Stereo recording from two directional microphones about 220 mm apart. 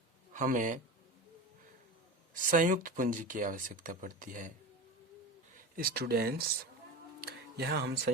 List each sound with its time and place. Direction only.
0.3 s speech: 35° right (ahead or behind)
2.3 s speech: 35° right (ahead or behind)
5.5 s speech: 40° right (ahead or behind)